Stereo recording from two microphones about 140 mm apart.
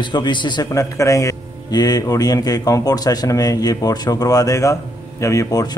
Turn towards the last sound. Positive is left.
turn(degrees=25)  # may be behind; listen again after turning